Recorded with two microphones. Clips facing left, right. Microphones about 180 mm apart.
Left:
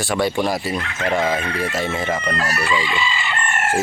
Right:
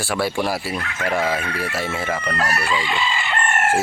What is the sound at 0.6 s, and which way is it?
Speech, 25° left (ahead or behind).